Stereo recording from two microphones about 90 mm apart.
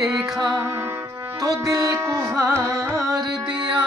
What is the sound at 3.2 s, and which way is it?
Music, 55° right (ahead or behind).